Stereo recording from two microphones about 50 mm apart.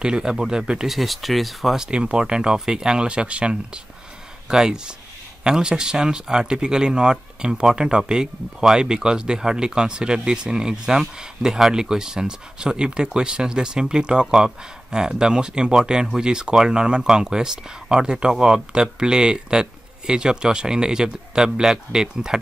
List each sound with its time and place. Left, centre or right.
0.0 s speech: centre
0.9 s speech: centre
1.8 s speech: centre